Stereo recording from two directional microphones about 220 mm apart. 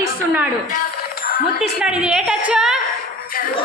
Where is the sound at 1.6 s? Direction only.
5° right (ahead or behind).